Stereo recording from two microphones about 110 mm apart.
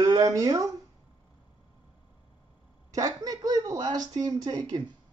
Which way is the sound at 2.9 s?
35° right (ahead or behind).